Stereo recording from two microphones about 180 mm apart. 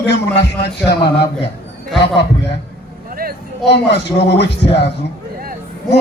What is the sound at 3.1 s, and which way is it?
Vehicle, 55° right (ahead or behind).